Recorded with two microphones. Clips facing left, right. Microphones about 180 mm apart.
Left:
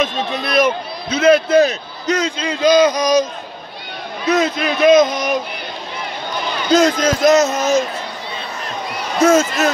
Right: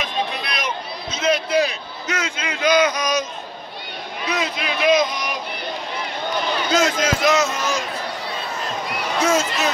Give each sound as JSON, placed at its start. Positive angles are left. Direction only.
{"t": 0.0, "sound": "a man's voice", "side_deg": 45}
{"t": 4.3, "sound": "a man's voice", "side_deg": 45}
{"t": 6.7, "sound": "speech", "side_deg": 40}
{"t": 9.2, "sound": "a man's voice", "side_deg": 45}